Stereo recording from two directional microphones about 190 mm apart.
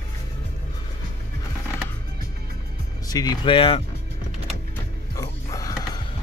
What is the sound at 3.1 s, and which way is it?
Speech, 20° left (ahead or behind).